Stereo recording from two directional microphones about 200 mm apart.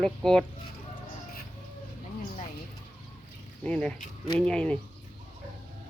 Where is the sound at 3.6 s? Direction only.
5° left (ahead or behind).